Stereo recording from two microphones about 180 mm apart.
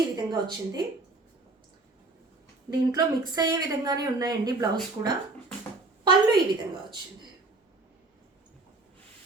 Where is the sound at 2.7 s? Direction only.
20° right (ahead or behind).